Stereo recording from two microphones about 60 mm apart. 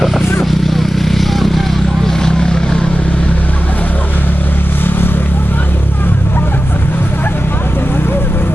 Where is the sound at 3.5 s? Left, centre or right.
Left.